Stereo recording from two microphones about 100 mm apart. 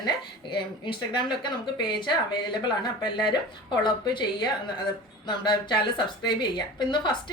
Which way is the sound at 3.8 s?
50° left (ahead or behind).